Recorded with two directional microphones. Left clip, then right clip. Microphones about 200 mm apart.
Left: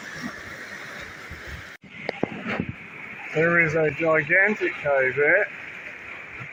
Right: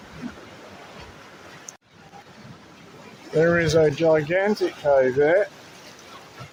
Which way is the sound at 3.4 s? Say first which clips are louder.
Right 2 dB; 40° right (ahead or behind).